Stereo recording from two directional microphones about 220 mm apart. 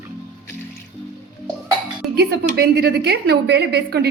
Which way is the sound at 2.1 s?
45° right (ahead or behind).